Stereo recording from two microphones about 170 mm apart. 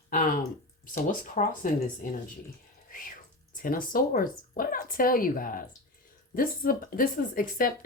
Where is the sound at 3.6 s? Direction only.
55° left (ahead or behind).